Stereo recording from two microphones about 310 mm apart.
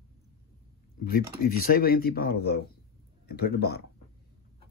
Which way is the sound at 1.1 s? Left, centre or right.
Left.